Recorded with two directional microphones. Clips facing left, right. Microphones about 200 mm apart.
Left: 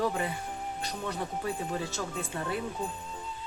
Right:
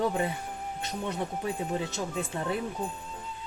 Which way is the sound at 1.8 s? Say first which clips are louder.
Right 2 dB; 20° right (ahead or behind).